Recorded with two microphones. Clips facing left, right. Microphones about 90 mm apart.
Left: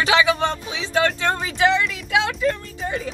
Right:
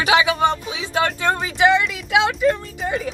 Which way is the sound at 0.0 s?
20° right (ahead or behind).